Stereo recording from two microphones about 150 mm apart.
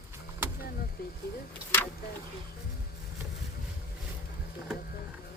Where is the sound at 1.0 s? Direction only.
80° left.